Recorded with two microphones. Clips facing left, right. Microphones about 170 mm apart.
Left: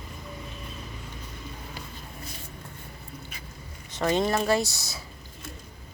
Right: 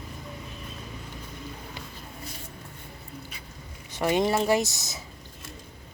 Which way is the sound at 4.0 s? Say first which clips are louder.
Right 1 dB; 10° right (ahead or behind).